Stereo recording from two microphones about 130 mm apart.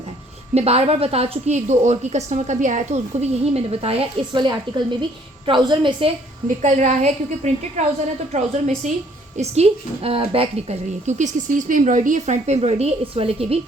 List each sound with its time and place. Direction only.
0.5 s a woman's voice: 50° right (ahead or behind)
4.4 s a woman's voice: 35° right (ahead or behind)
6.6 s a woman's voice: 65° right (ahead or behind)
9.4 s a woman's voice: 55° right (ahead or behind)